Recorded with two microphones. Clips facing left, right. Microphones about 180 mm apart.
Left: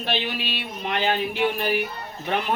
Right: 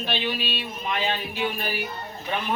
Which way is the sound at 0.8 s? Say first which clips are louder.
Left 4 dB; 65° left (ahead or behind).